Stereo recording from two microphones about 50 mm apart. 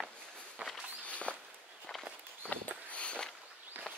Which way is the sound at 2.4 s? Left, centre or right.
Left.